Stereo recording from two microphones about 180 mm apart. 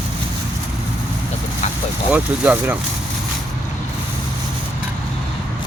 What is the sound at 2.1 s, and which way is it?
Speech, 10° right (ahead or behind).